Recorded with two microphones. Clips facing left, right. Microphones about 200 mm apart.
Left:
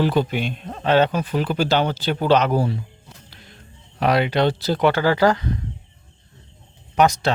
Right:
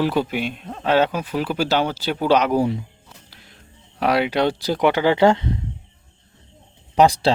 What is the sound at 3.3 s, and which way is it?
Music, 5° right (ahead or behind).